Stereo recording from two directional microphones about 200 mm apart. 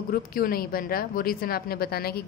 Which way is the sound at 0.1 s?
50° left (ahead or behind).